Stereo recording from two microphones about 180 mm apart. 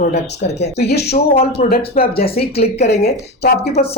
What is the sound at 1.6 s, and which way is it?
Speech, 55° left (ahead or behind).